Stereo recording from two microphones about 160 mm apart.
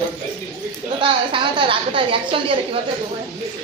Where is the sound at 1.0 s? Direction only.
30° right (ahead or behind).